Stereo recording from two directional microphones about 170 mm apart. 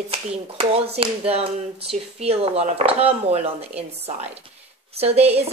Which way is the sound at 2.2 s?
35° right (ahead or behind).